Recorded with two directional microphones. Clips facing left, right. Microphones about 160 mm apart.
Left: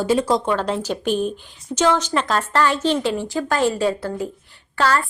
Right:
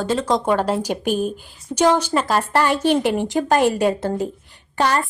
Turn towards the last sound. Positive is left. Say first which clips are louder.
# even
turn(degrees=-20)  # may be behind; listen again after turning